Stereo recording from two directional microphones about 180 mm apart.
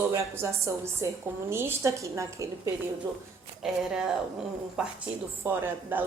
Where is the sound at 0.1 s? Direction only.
15° right (ahead or behind).